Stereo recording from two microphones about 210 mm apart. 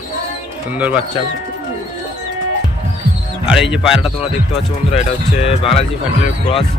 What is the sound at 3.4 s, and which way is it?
Speech, 5° right (ahead or behind).